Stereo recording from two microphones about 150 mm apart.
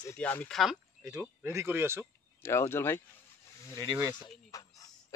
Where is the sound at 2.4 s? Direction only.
15° left (ahead or behind).